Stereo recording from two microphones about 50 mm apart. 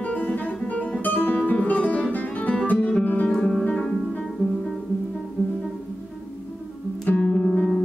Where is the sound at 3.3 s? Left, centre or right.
Centre.